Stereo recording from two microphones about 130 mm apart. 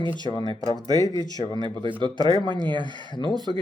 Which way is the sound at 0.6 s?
30° left (ahead or behind).